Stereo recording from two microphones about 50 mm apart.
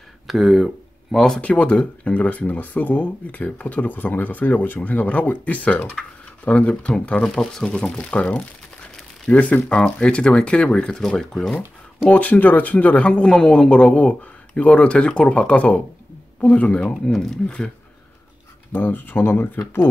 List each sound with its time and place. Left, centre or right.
0.3 s speech: centre
1.1 s speech: centre
1.4 s speech: left
2.2 s speech: left
9.7 s speech: left
12.1 s speech: left
13.3 s speech: centre
18.7 s speech: left